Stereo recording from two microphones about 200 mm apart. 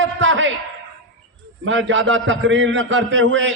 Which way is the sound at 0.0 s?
70° right (ahead or behind).